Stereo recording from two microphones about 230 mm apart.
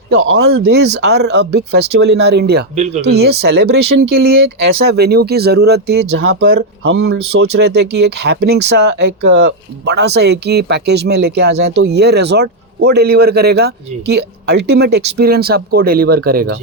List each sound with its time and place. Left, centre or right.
0.1 s speech: right
6.2 s speech: right
6.6 s speech: right